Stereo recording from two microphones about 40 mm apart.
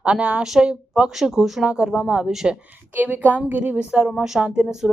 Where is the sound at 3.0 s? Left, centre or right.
Right.